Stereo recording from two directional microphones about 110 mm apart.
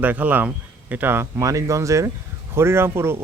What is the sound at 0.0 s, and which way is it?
Speech, 15° right (ahead or behind).